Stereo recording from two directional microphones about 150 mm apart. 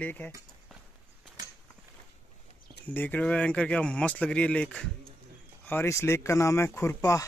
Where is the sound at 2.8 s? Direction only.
10° left (ahead or behind).